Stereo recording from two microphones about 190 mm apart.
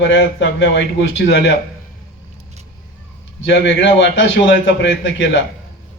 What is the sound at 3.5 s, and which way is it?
Speech, 70° left (ahead or behind).